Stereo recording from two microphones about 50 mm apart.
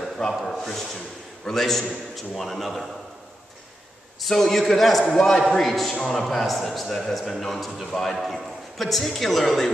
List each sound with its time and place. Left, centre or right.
0.5 s a man's voice: centre
4.2 s a man's voice: centre
5.9 s a man's voice: centre
6.2 s a man's voice: centre